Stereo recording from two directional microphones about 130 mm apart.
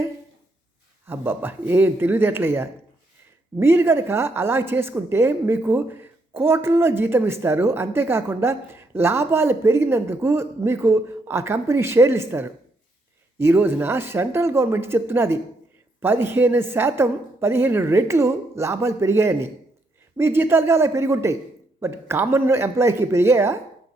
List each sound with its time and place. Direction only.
1.0 s a woman's voice: 15° right (ahead or behind)